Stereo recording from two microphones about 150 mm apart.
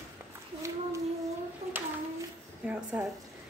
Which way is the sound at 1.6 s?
45° right (ahead or behind).